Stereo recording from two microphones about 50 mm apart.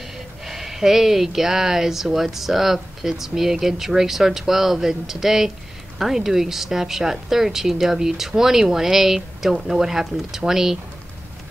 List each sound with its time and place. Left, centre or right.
0.5 s speech: centre